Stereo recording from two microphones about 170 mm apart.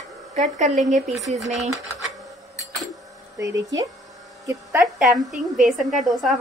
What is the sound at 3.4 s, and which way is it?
Speech, 20° right (ahead or behind).